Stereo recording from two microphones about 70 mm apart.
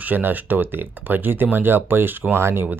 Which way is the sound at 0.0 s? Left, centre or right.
Right.